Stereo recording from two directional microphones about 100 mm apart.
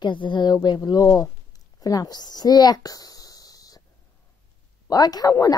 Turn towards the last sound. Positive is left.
turn(degrees=35)  # may be behind; listen again after turning